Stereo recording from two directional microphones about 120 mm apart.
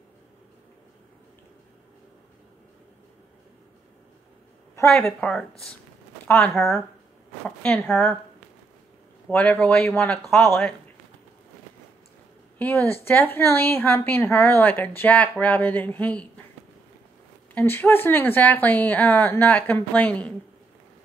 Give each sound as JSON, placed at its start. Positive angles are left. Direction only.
{"t": 4.8, "sound": "a woman's voice", "side_deg": 5}
{"t": 9.3, "sound": "a woman's voice", "side_deg": 10}
{"t": 12.5, "sound": "a woman's voice", "side_deg": 15}
{"t": 17.6, "sound": "a woman's voice", "side_deg": 15}